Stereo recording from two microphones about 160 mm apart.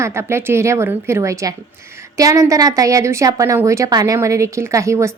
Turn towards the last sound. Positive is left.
turn(degrees=-20)  # may be behind; listen again after turning